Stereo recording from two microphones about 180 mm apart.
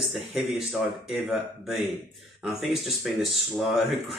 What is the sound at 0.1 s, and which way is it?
Speech, centre (ahead or behind).